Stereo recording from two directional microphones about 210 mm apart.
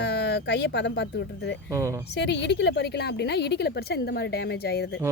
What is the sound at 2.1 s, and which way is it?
A woman's voice, 55° left (ahead or behind).